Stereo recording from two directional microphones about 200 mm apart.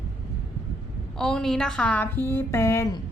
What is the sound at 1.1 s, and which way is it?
A woman's voice, 5° left (ahead or behind).